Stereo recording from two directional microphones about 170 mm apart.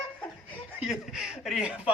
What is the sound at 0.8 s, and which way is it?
Speech, 5° right (ahead or behind).